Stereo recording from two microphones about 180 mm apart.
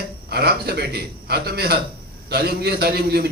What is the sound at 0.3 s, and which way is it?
A man's voice, 60° right (ahead or behind).